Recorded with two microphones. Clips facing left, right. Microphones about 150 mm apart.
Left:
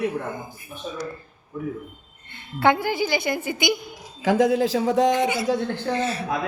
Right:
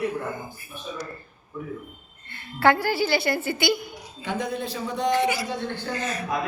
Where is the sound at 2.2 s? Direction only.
20° left (ahead or behind).